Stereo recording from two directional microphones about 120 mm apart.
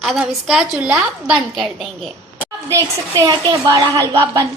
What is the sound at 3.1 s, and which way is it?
Speech, 25° right (ahead or behind).